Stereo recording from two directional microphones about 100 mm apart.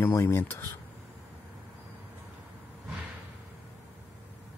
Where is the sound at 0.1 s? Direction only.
25° left (ahead or behind).